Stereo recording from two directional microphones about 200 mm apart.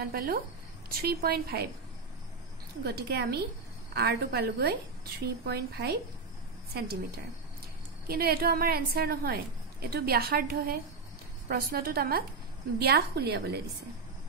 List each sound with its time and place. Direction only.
0.0 s a woman's voice: 50° right (ahead or behind)
2.8 s a woman's voice: 55° right (ahead or behind)
8.1 s a woman's voice: 50° right (ahead or behind)